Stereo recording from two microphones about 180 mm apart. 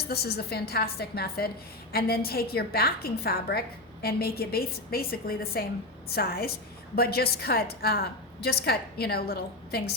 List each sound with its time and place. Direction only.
0.0 s a woman's voice: 60° left (ahead or behind)